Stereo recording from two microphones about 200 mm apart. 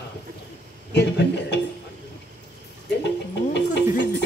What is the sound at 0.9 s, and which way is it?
Speech, 60° left (ahead or behind).